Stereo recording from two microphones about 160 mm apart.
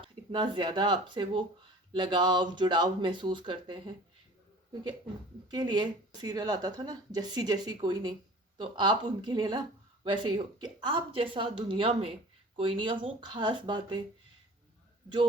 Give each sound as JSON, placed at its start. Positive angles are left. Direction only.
{"t": 0.0, "sound": "speech", "side_deg": -30}
{"t": 5.5, "sound": "speech", "side_deg": -25}